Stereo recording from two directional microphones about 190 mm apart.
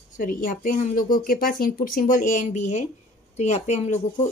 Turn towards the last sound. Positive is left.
turn(degrees=35)  # may be behind; listen again after turning